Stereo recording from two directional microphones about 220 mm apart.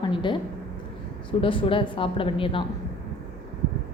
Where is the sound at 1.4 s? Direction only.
25° left (ahead or behind).